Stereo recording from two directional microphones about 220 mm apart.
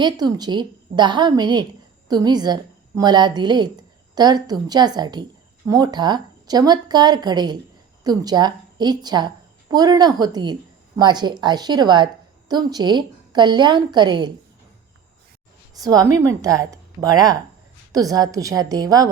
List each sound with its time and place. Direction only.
0.0 s a woman's voice: 20° right (ahead or behind)
15.7 s a woman's voice: 15° right (ahead or behind)